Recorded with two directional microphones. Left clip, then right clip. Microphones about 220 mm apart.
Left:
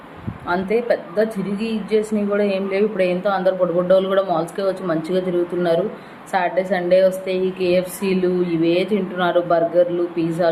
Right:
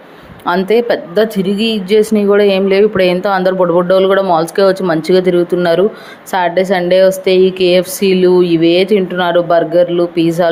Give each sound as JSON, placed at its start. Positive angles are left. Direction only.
{"t": 0.4, "sound": "speech", "side_deg": -40}